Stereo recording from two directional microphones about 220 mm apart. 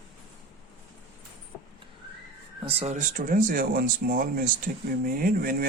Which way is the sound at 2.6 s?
25° right (ahead or behind).